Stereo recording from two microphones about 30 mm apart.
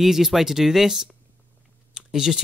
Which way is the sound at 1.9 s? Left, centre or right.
Right.